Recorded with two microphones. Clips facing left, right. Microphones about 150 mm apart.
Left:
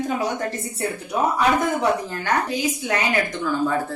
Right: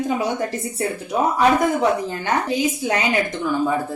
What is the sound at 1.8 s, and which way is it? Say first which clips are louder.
Speech: right 2 dB; 25° right (ahead or behind).